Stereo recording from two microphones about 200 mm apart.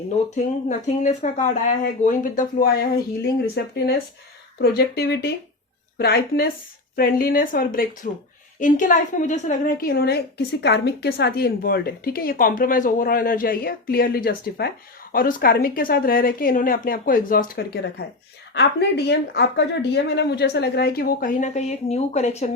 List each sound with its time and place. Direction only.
0.1 s a woman's voice: 35° left (ahead or behind)